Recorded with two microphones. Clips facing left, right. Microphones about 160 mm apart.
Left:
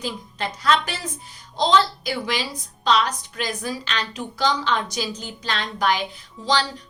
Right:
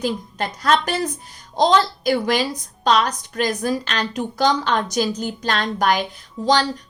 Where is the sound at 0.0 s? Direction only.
45° right (ahead or behind).